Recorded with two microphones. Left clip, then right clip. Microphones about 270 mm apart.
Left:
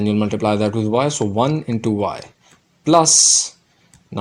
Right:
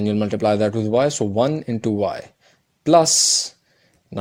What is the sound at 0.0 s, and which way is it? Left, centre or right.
Speech, right.